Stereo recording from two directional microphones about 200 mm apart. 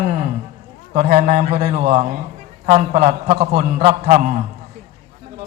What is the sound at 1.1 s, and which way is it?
A man's voice, 35° right (ahead or behind).